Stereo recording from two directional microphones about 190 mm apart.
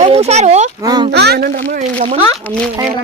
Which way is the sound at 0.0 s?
35° right (ahead or behind).